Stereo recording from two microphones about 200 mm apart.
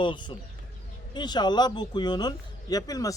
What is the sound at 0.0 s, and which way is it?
A man's voice, 25° left (ahead or behind).